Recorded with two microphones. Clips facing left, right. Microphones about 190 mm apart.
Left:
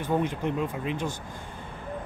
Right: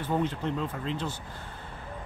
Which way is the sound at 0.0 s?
15° left (ahead or behind).